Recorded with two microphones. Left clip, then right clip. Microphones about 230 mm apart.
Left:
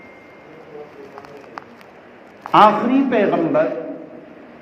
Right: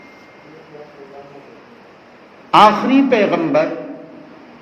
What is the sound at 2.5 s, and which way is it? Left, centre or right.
A man's voice, right.